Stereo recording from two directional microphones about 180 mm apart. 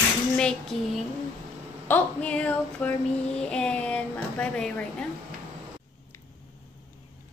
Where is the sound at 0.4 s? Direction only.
5° left (ahead or behind).